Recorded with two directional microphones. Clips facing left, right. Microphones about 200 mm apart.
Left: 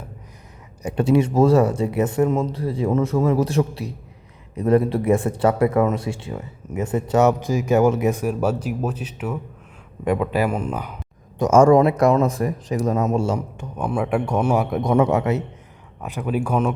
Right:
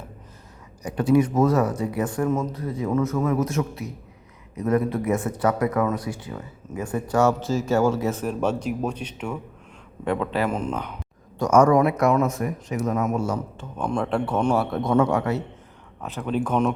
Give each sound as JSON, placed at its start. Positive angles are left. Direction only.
{"t": 0.8, "sound": "a man's voice", "side_deg": 25}
{"t": 11.3, "sound": "speech", "side_deg": 25}
{"t": 13.6, "sound": "a man's voice", "side_deg": 10}